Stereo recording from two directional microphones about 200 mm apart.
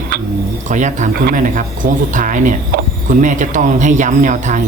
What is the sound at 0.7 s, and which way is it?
Speech, 40° right (ahead or behind).